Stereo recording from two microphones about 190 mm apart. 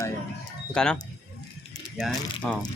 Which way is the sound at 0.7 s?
5° left (ahead or behind).